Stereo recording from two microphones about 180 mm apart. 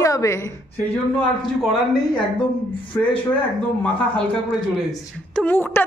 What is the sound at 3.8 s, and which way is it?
Speech, 10° left (ahead or behind).